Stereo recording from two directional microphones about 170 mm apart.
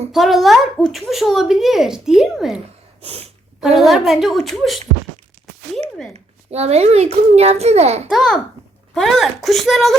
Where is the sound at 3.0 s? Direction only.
35° right (ahead or behind).